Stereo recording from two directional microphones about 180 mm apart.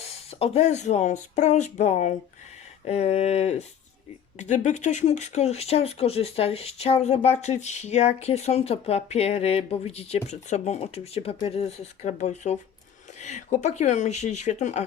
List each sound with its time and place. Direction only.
0.0 s speech: 35° left (ahead or behind)